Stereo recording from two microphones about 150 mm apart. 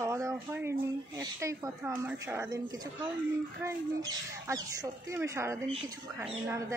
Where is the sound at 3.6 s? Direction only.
20° right (ahead or behind).